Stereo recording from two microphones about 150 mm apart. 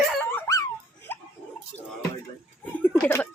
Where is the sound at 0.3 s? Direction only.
15° left (ahead or behind).